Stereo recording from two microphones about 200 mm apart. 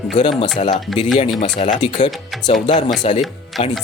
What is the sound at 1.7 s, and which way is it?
Speech, 35° left (ahead or behind).